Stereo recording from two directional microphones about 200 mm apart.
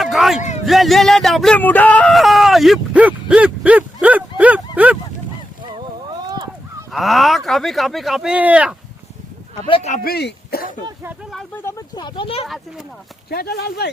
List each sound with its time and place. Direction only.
0.0 s a sound: centre (ahead or behind)
0.6 s speech: centre (ahead or behind)
6.2 s a sound: 20° right (ahead or behind)
6.9 s speech: centre (ahead or behind)
9.6 s speech: 30° left (ahead or behind)
10.0 s speech: 50° left (ahead or behind)
11.3 s speech: 5° left (ahead or behind); by 12.5 s 30° left (ahead or behind)
13.3 s speech: 55° left (ahead or behind)